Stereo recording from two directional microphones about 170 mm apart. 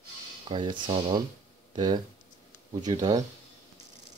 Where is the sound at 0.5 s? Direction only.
30° right (ahead or behind).